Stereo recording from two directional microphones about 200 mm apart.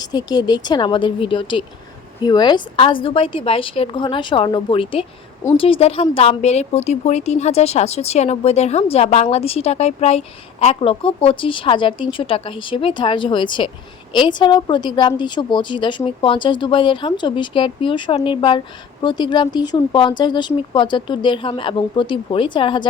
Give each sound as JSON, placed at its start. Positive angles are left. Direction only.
{"t": 0.0, "sound": "a woman's voice", "side_deg": 20}